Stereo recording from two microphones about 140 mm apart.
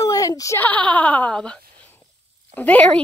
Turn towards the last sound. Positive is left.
turn(degrees=10)  # may be behind; listen again after turning